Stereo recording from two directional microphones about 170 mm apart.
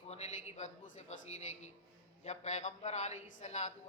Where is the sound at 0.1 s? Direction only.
40° left (ahead or behind).